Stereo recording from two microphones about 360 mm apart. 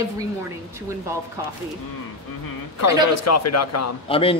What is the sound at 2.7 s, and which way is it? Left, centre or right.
Speech, left.